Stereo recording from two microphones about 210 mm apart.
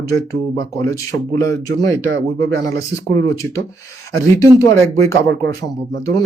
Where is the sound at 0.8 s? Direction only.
15° left (ahead or behind).